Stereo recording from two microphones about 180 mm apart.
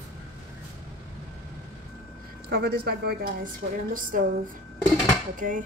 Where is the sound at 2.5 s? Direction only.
60° right (ahead or behind).